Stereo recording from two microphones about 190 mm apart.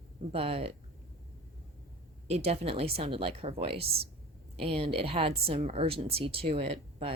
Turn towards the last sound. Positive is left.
turn(degrees=-30)  # may be behind; listen again after turning